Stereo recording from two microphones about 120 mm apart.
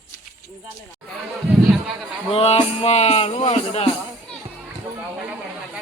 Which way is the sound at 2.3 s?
55° left (ahead or behind).